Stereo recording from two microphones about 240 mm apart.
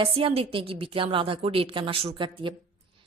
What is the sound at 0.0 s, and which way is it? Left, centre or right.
Speech, right.